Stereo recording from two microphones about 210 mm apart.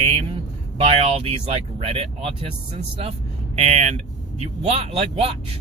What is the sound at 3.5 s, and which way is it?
Speech, 30° right (ahead or behind).